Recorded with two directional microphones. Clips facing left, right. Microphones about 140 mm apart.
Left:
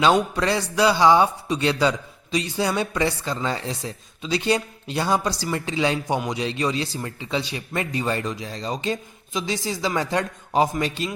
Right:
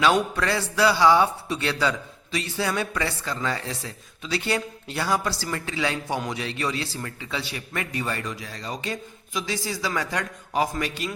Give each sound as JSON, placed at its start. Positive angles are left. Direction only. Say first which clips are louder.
{"t": 0.0, "sound": "a man's voice", "louder": "left 2 dB", "side_deg": 20}